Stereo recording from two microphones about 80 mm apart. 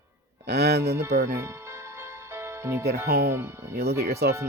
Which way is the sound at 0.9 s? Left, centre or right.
Right.